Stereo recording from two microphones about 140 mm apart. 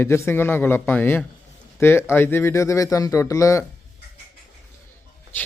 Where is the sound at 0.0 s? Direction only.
15° left (ahead or behind).